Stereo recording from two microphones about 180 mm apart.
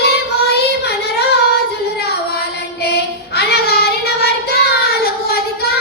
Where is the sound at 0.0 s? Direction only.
65° left (ahead or behind).